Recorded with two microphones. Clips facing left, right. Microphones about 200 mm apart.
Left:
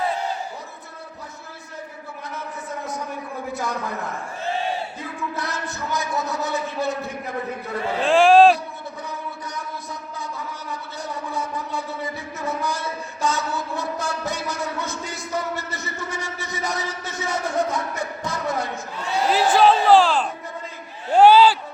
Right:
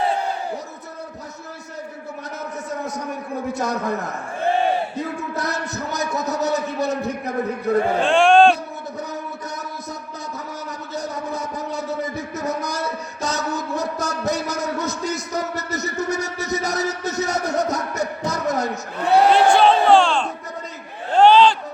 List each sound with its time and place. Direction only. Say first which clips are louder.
3.5 s a man's voice: right 4 dB; 40° right (ahead or behind)
4.4 s crowd: right 7 dB; 55° right (ahead or behind)
8.0 s speech: left 2 dB; centre (ahead or behind)
9.6 s music: right 1 dB; 40° right (ahead or behind)
10.7 s a sound: right 5 dB; 40° right (ahead or behind)
18.9 s speech: right 9 dB; 60° right (ahead or behind)
19.3 s music: right 2 dB; centre (ahead or behind)
21.1 s a sound: even; 10° left (ahead or behind)